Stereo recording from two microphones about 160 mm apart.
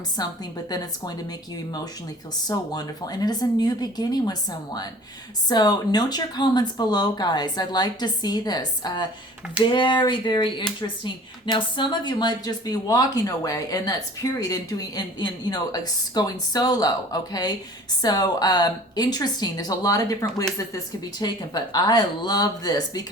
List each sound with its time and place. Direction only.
0.2 s speech: 25° left (ahead or behind)
2.5 s speech: 25° left (ahead or behind)
21.2 s speech: 25° left (ahead or behind)